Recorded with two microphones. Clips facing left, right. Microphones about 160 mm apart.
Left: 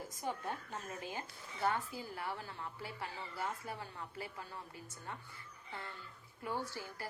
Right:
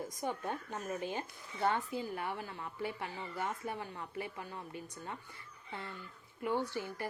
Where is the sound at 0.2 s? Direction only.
20° right (ahead or behind).